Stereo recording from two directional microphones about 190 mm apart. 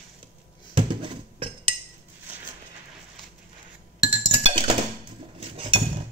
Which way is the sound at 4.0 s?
30° right (ahead or behind).